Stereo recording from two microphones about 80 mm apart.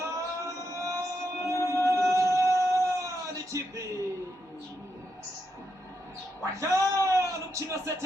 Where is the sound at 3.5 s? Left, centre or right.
Right.